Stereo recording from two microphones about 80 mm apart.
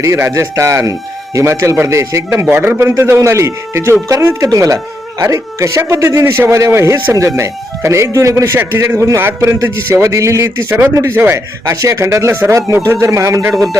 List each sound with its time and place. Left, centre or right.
0.0 s a man's voice: right
11.3 s a man's voice: right